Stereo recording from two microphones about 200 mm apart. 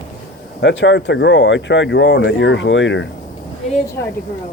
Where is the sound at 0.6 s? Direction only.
60° left (ahead or behind).